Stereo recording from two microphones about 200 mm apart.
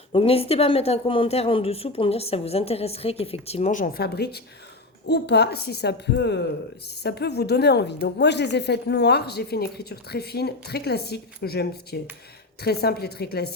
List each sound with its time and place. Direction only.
0.1 s a woman's voice: 30° left (ahead or behind); by 13.5 s 50° left (ahead or behind)